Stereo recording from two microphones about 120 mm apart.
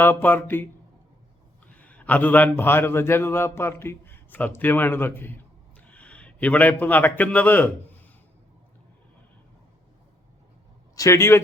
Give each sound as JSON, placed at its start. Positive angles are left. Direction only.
{"t": 0.0, "sound": "a man's voice", "side_deg": 15}
{"t": 1.7, "sound": "a man's voice", "side_deg": 10}
{"t": 10.9, "sound": "speech", "side_deg": 25}